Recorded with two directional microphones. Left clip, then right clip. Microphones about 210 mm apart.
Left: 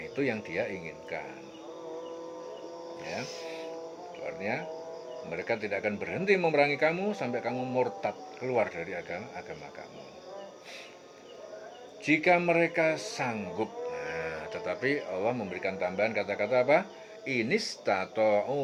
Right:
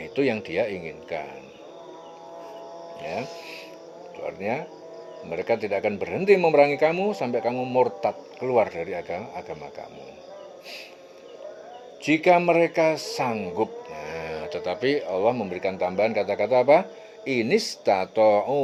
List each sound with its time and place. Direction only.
0.0 s speech: 35° right (ahead or behind)
3.0 s speech: 35° right (ahead or behind)
12.0 s speech: 35° right (ahead or behind)